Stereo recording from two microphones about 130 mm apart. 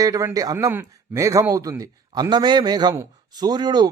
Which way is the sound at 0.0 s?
25° right (ahead or behind).